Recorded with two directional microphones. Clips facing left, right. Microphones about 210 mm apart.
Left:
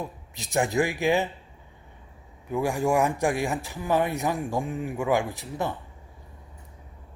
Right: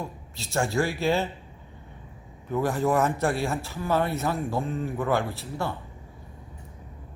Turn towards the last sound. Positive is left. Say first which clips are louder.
# left 1 dB
turn(degrees=15)  # may be behind; listen again after turning